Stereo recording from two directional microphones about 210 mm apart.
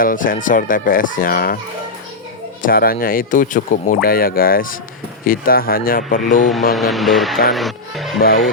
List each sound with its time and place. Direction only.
0.0 s speech: 40° left (ahead or behind)
2.6 s speech: 45° left (ahead or behind)
6.4 s speech: centre (ahead or behind)